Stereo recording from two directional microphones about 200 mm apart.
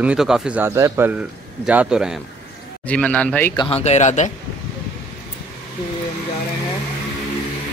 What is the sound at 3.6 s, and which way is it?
Speech, 30° left (ahead or behind).